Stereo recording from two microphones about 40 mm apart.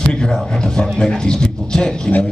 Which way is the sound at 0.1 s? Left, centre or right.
Left.